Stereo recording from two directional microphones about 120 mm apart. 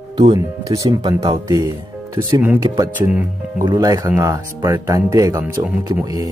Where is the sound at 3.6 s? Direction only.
30° right (ahead or behind).